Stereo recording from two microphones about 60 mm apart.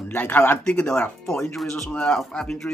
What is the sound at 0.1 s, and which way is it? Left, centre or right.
Speech, left.